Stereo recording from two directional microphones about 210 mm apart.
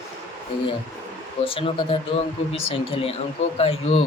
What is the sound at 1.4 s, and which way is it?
Speech, 25° left (ahead or behind).